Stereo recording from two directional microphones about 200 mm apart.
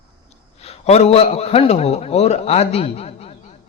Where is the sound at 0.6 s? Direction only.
30° left (ahead or behind).